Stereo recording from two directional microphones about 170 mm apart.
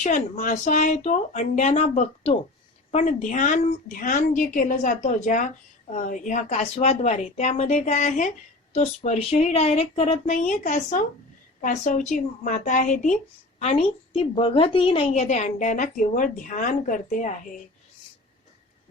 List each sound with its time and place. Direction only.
0.0 s a woman's voice: 45° left (ahead or behind)